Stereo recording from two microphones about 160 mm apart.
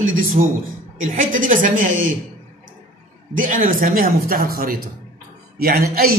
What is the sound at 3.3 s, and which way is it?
Speech, 55° right (ahead or behind).